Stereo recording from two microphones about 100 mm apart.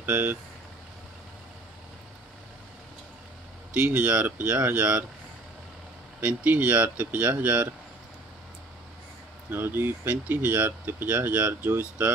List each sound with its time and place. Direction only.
0.0 s speech: 20° right (ahead or behind)
3.7 s speech: 15° right (ahead or behind)
6.2 s speech: 15° right (ahead or behind)
9.5 s speech: 20° right (ahead or behind)